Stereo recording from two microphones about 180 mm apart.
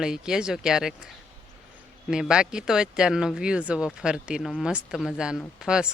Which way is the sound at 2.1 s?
5° right (ahead or behind).